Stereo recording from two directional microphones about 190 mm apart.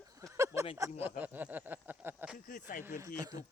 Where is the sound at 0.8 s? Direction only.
10° right (ahead or behind).